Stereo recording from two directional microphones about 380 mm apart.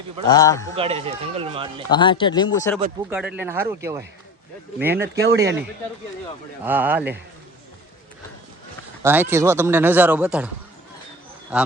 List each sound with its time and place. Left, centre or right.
0.3 s speech: centre
0.8 s speech: centre
1.9 s speech: centre
3.1 s speech: centre
5.2 s speech: right
6.7 s speech: centre
9.0 s speech: centre